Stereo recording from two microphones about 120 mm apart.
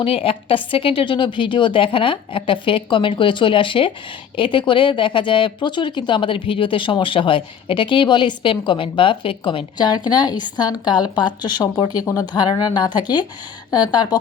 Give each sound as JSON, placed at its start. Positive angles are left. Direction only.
{"t": 0.0, "sound": "speech", "side_deg": 50}